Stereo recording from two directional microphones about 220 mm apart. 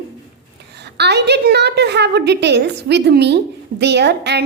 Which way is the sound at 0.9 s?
50° right (ahead or behind).